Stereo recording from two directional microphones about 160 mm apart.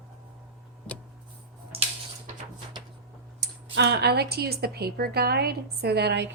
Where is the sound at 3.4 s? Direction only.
90° right.